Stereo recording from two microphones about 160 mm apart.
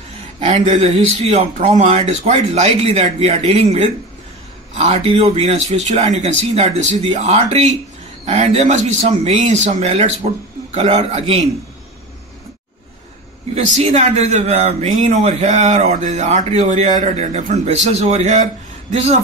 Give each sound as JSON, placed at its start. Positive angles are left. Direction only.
{"t": 0.4, "sound": "speech", "side_deg": -40}
{"t": 13.6, "sound": "speech", "side_deg": -50}